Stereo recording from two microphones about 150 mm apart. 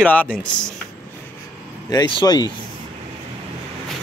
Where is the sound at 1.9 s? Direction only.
30° left (ahead or behind).